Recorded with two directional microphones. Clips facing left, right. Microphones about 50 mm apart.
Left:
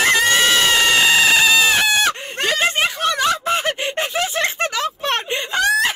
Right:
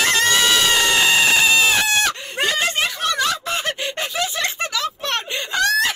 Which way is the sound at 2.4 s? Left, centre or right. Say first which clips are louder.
Left 3 dB; left.